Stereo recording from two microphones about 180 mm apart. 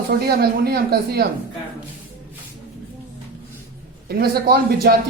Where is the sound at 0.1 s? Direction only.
60° right (ahead or behind).